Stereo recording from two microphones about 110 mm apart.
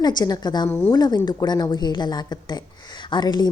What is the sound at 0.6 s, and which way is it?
Speech, 20° left (ahead or behind).